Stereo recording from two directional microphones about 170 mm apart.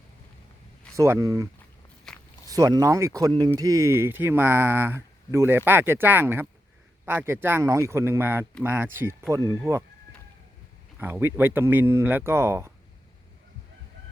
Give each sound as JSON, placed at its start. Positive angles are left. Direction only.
{"t": 0.9, "sound": "speech", "side_deg": -15}
{"t": 2.1, "sound": "walk", "side_deg": 0}
{"t": 2.5, "sound": "speech", "side_deg": -20}
{"t": 11.0, "sound": "speech", "side_deg": -15}